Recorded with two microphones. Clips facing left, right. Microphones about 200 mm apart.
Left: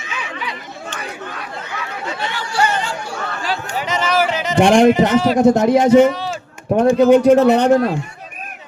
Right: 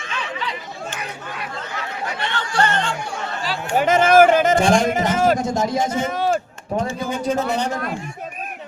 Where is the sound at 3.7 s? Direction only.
50° right (ahead or behind).